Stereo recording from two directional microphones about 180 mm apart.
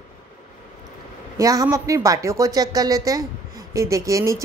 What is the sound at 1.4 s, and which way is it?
A woman's voice, 20° right (ahead or behind).